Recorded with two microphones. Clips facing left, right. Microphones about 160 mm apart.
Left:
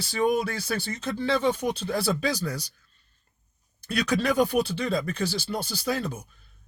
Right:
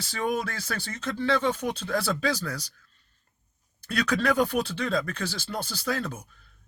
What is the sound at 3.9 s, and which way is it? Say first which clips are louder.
Speech: even; 15° left (ahead or behind).